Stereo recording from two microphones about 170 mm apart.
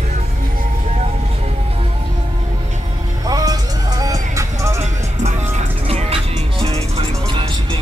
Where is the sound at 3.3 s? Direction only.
20° right (ahead or behind).